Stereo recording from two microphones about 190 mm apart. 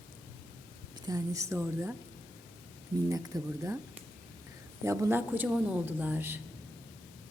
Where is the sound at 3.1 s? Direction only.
15° right (ahead or behind).